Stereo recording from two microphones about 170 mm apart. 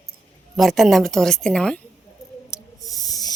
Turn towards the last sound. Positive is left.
turn(degrees=20)  # may be behind; listen again after turning